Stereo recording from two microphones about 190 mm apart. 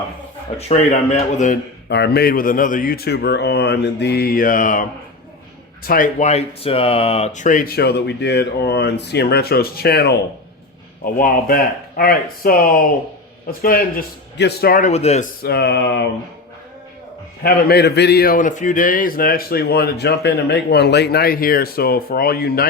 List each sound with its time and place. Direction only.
0.7 s speech: 35° left (ahead or behind)
1.9 s speech: 60° left (ahead or behind); by 15.3 s 35° left (ahead or behind)
15.4 s speech: 60° left (ahead or behind)
17.4 s speech: 55° left (ahead or behind)